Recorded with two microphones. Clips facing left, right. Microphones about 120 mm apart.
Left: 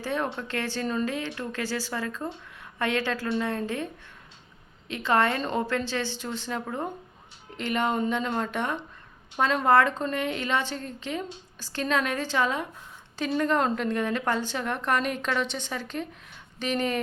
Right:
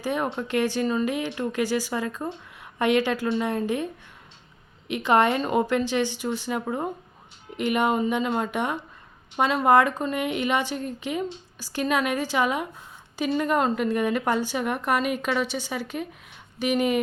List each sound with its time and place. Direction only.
0.0 s a woman's voice: 15° right (ahead or behind)
4.9 s a woman's voice: 15° right (ahead or behind)